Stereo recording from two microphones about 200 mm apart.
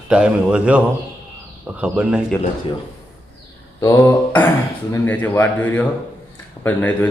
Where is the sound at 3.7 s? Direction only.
15° left (ahead or behind).